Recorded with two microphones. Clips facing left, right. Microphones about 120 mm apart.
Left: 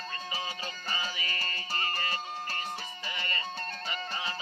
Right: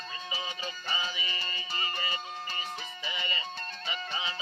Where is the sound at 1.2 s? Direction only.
50° left (ahead or behind).